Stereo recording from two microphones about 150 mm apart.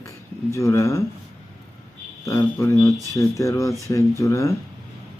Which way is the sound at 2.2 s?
20° left (ahead or behind).